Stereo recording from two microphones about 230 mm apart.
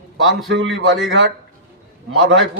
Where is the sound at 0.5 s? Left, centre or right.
Right.